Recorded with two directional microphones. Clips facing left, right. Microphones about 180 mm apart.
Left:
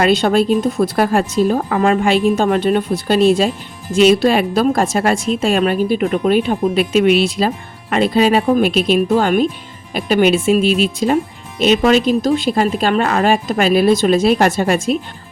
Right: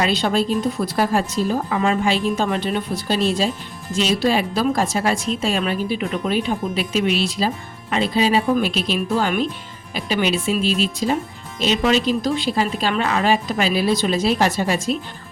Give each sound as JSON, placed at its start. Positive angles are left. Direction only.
{"t": 0.0, "sound": "a woman's voice", "side_deg": 50}